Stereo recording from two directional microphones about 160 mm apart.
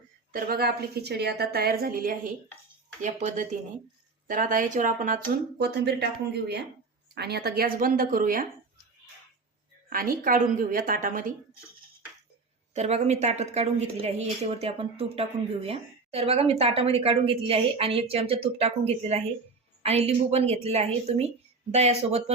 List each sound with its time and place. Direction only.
0.3 s a woman's voice: 60° right (ahead or behind)
3.0 s speech: 50° right (ahead or behind); by 6.1 s 90° right
7.1 s a woman's voice: 90° right; by 8.4 s 60° right (ahead or behind)
9.9 s speech: 60° right (ahead or behind)
12.7 s a woman's voice: 45° right (ahead or behind)